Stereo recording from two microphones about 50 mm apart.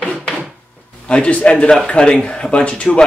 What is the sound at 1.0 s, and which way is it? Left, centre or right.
Speech, left.